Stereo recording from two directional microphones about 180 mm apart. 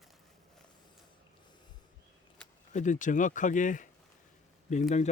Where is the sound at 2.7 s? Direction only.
45° left (ahead or behind).